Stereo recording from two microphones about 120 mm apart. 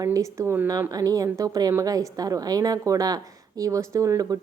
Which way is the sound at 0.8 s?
30° right (ahead or behind).